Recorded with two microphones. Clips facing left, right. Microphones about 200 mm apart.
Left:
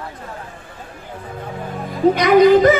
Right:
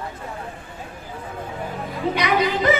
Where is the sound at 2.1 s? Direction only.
45° left (ahead or behind).